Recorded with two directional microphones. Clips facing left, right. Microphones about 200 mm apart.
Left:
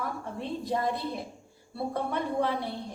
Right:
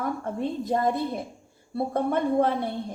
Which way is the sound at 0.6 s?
45° right (ahead or behind).